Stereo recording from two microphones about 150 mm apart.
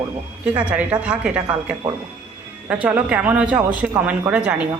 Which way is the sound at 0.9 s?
30° right (ahead or behind).